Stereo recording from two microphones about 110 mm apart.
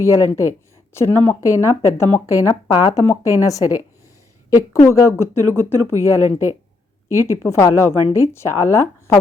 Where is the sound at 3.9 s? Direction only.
30° left (ahead or behind).